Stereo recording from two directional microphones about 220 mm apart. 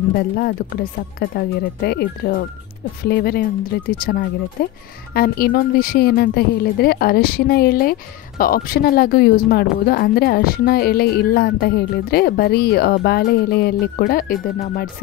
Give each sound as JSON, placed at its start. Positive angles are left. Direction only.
{"t": 0.4, "sound": "a woman's voice", "side_deg": 45}